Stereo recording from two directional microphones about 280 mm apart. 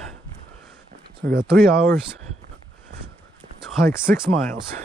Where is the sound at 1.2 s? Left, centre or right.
Right.